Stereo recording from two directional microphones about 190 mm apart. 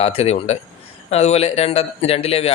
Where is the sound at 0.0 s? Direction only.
30° left (ahead or behind).